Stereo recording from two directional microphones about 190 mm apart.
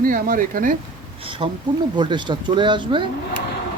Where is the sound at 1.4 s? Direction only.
30° right (ahead or behind).